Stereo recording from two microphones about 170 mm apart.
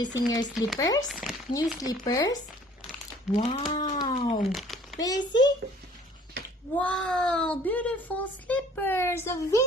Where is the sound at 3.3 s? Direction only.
35° left (ahead or behind).